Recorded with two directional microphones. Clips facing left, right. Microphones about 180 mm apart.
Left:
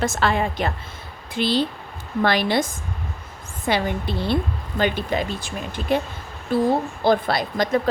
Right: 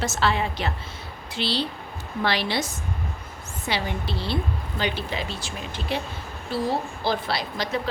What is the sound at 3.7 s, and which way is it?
A woman's voice, 50° left (ahead or behind).